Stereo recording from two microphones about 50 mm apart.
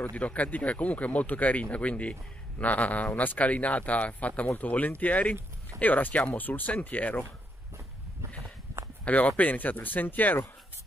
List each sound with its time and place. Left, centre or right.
0.1 s speech: left
9.0 s speech: left